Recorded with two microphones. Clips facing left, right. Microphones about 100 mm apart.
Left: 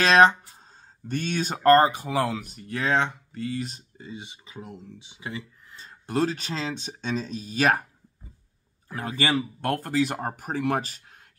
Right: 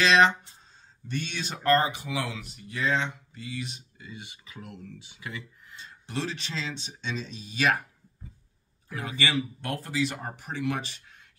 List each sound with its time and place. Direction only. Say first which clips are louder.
0.0 s a sound: left 4 dB; 45° left (ahead or behind)
1.0 s speech: left 6 dB; 45° left (ahead or behind)
4.1 s speech: left 4 dB; 20° left (ahead or behind)
5.3 s speech: left 4 dB; 45° left (ahead or behind)
8.8 s speech: left 3 dB; 45° left (ahead or behind)